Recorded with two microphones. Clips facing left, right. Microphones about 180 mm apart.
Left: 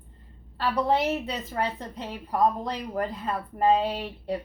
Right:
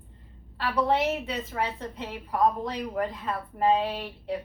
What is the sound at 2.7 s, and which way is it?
A woman's voice, 35° left (ahead or behind).